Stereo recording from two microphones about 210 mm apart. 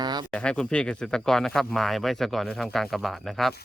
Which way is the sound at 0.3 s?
5° left (ahead or behind).